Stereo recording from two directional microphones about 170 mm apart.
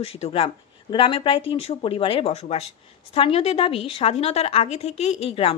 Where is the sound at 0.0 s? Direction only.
35° left (ahead or behind).